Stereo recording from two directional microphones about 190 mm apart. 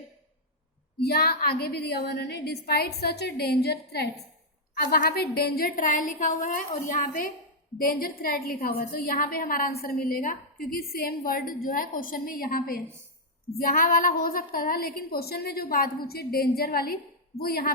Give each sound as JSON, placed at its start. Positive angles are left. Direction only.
{"t": 0.9, "sound": "a woman's voice", "side_deg": 55}